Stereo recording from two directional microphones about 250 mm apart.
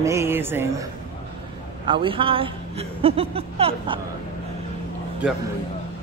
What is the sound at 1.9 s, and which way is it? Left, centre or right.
A woman's voice, centre.